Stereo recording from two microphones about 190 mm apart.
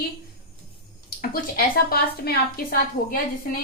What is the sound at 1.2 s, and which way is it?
A woman's voice, 50° left (ahead or behind).